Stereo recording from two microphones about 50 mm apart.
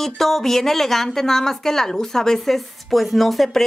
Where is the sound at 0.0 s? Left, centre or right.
Centre.